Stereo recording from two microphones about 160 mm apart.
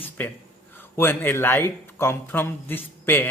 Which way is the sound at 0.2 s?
10° left (ahead or behind).